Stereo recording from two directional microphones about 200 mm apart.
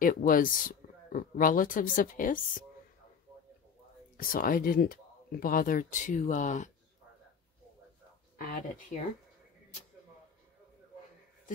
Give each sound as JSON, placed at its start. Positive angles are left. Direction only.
{"t": 0.0, "sound": "speech", "side_deg": 45}
{"t": 4.2, "sound": "speech", "side_deg": 45}
{"t": 8.4, "sound": "speech", "side_deg": 45}